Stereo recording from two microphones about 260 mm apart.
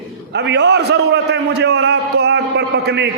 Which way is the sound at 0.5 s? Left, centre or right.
Right.